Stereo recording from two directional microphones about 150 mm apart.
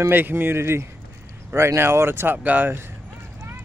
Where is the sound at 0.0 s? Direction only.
15° right (ahead or behind).